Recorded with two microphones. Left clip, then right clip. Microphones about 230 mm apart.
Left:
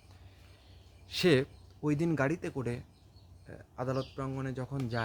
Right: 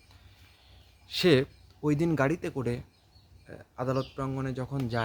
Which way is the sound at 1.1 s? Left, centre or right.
Centre.